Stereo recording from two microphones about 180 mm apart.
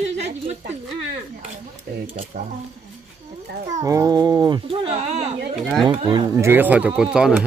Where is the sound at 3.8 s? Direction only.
20° right (ahead or behind).